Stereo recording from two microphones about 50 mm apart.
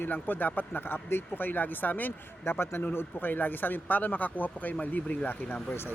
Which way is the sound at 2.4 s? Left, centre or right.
Left.